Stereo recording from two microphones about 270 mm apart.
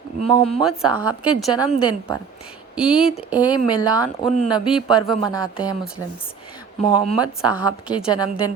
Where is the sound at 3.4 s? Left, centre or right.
Centre.